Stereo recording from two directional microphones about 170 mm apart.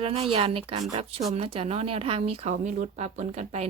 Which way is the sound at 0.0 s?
35° right (ahead or behind).